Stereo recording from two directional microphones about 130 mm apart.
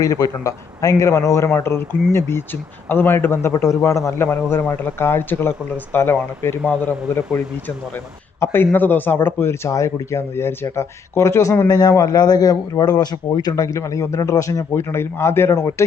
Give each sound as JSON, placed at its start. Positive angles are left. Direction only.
{"t": 0.0, "sound": "a man's voice", "side_deg": 25}
{"t": 8.4, "sound": "a man's voice", "side_deg": 15}